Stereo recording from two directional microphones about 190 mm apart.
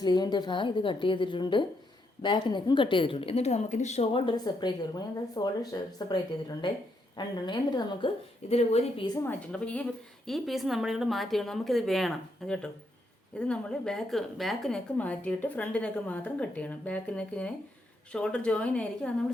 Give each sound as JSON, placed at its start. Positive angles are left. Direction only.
{"t": 0.0, "sound": "a woman's voice", "side_deg": 20}
{"t": 8.4, "sound": "a woman's voice", "side_deg": 35}
{"t": 9.2, "sound": "a woman's voice", "side_deg": 5}